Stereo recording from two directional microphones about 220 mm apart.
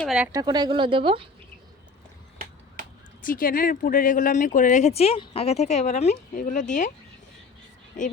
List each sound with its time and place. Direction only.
0.0 s speech: centre (ahead or behind)
0.3 s a woman's voice: 15° right (ahead or behind)
3.2 s speech: 40° left (ahead or behind)
8.0 s speech: 35° left (ahead or behind)